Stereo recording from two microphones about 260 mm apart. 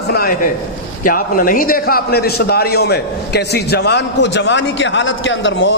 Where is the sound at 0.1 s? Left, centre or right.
Left.